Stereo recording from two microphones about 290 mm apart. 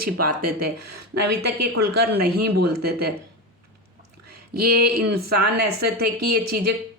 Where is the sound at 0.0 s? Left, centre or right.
Right.